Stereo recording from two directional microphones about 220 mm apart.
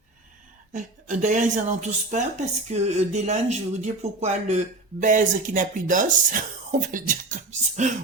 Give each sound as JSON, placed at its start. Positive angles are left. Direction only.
{"t": 0.7, "sound": "speech", "side_deg": -35}